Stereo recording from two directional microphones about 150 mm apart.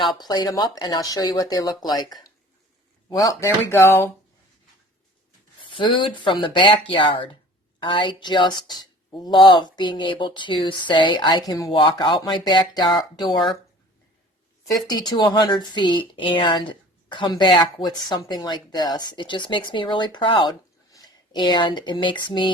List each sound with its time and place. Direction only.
0.0 s speech: 25° left (ahead or behind)
5.7 s a woman's voice: 35° left (ahead or behind)
14.8 s a woman's voice: 30° left (ahead or behind)